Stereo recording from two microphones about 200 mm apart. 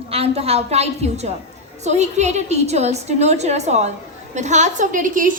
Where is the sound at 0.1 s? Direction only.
30° right (ahead or behind).